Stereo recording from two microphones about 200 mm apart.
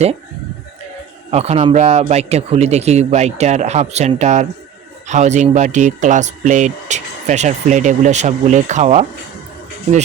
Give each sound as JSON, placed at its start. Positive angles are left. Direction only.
{"t": 1.3, "sound": "speech", "side_deg": -30}